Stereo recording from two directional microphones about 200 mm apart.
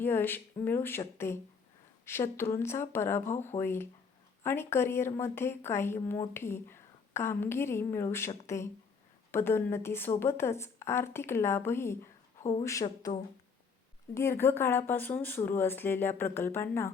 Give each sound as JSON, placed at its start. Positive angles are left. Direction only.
{"t": 0.0, "sound": "speech", "side_deg": 10}